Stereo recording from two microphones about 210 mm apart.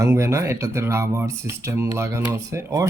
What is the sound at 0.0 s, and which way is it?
Speech, 15° right (ahead or behind).